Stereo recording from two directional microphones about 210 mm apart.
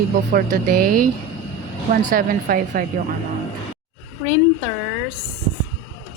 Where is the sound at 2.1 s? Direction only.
45° right (ahead or behind).